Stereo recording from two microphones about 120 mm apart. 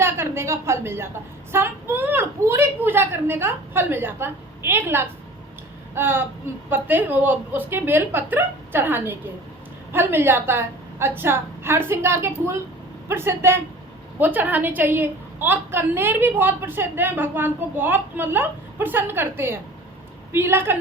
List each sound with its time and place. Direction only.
0.0 s a woman's voice: 20° right (ahead or behind)